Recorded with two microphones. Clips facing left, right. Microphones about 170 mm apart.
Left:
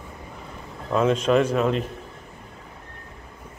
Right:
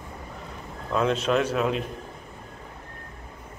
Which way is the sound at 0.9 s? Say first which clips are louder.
Left 4 dB; 5° left (ahead or behind).